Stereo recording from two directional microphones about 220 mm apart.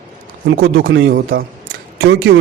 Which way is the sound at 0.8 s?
60° right (ahead or behind).